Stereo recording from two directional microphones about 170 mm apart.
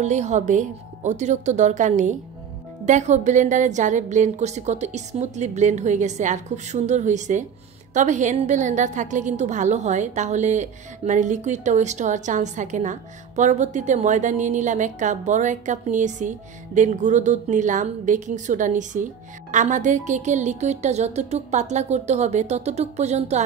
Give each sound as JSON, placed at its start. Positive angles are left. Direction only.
{"t": 0.0, "sound": "a woman's voice", "side_deg": -45}